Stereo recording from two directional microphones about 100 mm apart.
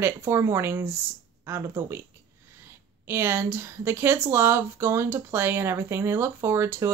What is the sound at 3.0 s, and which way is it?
Speech, 25° right (ahead or behind).